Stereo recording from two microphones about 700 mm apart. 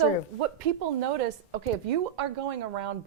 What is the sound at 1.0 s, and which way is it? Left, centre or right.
A woman's voice, right.